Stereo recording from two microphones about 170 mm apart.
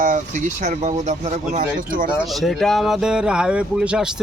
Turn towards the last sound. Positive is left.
turn(degrees=-5)  # may be behind; listen again after turning